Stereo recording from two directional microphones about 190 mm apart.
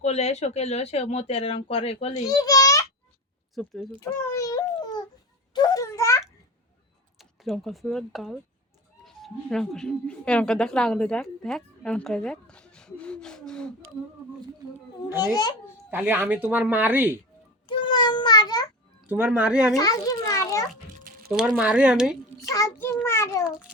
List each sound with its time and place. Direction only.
0.0 s speech: 35° left (ahead or behind)
2.2 s a child's voice: 20° left (ahead or behind)
3.5 s speech: centre (ahead or behind)
4.0 s a sound: 15° left (ahead or behind)
7.2 s speech: centre (ahead or behind)
15.2 s a child's voice: 20° left (ahead or behind)
15.9 s speech: 10° right (ahead or behind)
17.7 s meow: 20° left (ahead or behind)
19.0 s speech: 10° right (ahead or behind)
19.7 s a child's voice: 20° left (ahead or behind)
21.3 s speech: 5° right (ahead or behind)
22.4 s a child's voice: 15° left (ahead or behind)